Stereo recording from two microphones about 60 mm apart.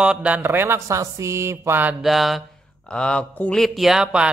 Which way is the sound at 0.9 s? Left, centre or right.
Right.